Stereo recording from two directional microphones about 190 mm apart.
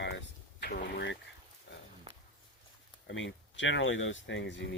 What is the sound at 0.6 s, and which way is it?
Speech, 60° left (ahead or behind).